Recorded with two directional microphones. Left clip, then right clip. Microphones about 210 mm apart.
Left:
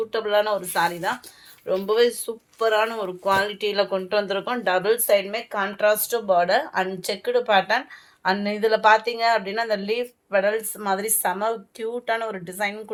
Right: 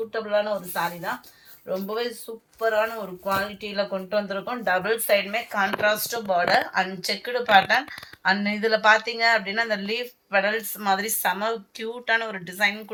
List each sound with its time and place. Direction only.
0.1 s speech: 55° left (ahead or behind)
4.8 s speech: 75° left (ahead or behind); by 12.8 s 60° left (ahead or behind)